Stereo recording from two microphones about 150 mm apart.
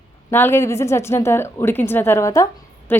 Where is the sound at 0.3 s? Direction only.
15° left (ahead or behind).